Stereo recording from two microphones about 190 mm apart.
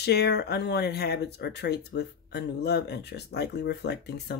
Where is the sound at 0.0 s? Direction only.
60° left (ahead or behind).